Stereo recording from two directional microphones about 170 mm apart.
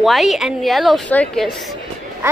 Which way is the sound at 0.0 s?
Centre (ahead or behind).